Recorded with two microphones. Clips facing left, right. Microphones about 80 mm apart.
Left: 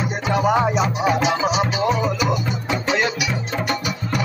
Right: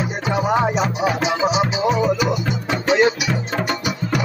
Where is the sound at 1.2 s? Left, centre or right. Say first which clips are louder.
Right 1 dB; centre.